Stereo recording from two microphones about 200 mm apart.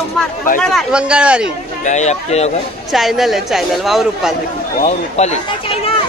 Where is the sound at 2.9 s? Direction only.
Centre (ahead or behind).